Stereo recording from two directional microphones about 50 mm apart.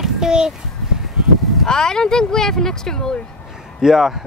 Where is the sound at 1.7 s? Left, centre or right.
Centre.